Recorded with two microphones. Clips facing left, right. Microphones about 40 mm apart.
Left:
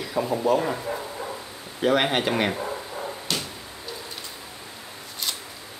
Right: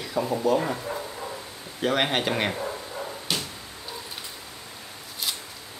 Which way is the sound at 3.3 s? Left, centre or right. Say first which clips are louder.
Even; centre.